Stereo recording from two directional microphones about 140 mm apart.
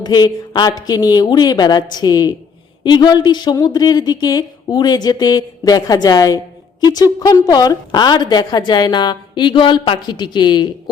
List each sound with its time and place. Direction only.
0.0 s a woman's voice: 30° left (ahead or behind)